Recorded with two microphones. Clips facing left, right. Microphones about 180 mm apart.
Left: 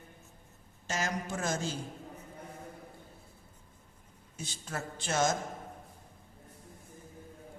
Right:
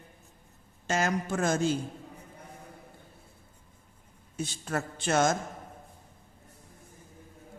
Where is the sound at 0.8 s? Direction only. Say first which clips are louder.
Right 6 dB; 60° right (ahead or behind).